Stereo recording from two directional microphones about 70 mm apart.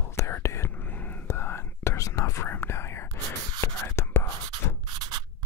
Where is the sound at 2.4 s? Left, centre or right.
Left.